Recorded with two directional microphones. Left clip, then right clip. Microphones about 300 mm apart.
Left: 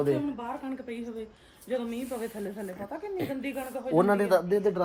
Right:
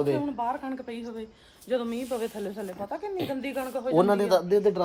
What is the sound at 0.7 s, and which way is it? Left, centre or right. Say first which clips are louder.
Speech: right 2 dB; right.